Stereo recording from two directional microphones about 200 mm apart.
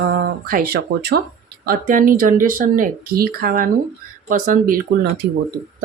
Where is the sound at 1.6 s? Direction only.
40° right (ahead or behind).